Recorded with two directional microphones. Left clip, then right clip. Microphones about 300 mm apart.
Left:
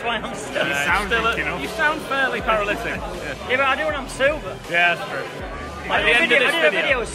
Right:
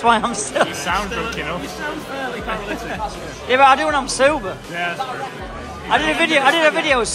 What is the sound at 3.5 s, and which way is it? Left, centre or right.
A man's voice, centre.